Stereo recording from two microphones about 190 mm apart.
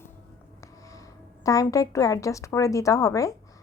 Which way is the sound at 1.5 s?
15° left (ahead or behind).